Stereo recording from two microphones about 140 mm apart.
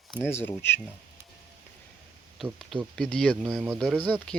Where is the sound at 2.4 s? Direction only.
Centre (ahead or behind).